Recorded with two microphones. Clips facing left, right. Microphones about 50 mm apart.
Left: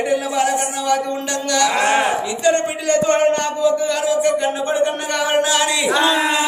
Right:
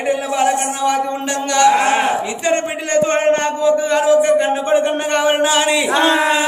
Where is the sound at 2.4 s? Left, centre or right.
Right.